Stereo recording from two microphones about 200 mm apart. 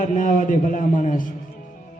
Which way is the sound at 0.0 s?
40° left (ahead or behind).